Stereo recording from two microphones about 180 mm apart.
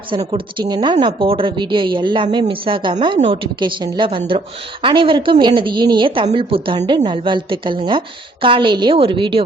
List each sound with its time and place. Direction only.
0.1 s a woman's voice: 30° right (ahead or behind)